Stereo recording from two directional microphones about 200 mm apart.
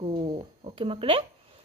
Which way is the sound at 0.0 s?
25° right (ahead or behind).